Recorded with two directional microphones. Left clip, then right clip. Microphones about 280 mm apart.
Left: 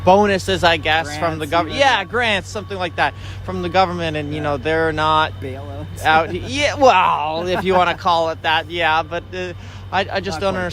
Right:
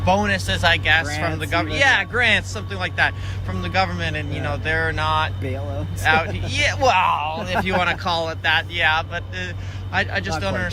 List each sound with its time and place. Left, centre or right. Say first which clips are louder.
0.0 s speech: left 6 dB; centre